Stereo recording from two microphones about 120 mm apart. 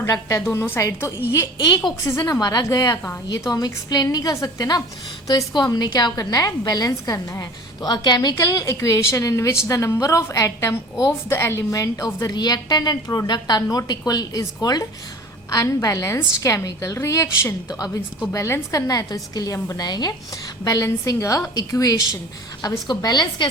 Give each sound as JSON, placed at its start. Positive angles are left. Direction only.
{"t": 0.0, "sound": "a woman's voice", "side_deg": 30}
{"t": 0.5, "sound": "a woman's voice", "side_deg": 20}
{"t": 1.5, "sound": "a woman's voice", "side_deg": 40}
{"t": 2.0, "sound": "a woman's voice", "side_deg": 25}